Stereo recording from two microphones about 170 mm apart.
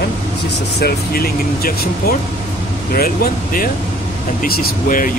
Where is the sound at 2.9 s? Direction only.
60° left (ahead or behind).